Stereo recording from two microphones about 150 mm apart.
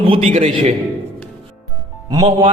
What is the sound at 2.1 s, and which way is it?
Speech, 30° right (ahead or behind).